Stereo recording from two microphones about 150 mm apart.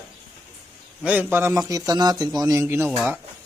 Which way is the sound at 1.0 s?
10° right (ahead or behind).